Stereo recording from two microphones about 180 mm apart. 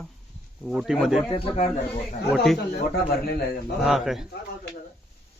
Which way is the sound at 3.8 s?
Centre (ahead or behind).